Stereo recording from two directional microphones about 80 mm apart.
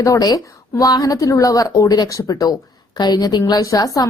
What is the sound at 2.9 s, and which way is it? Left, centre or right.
A woman's voice, left.